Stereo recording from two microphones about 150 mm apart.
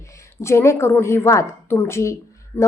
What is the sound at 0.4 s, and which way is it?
A woman's voice, 20° left (ahead or behind).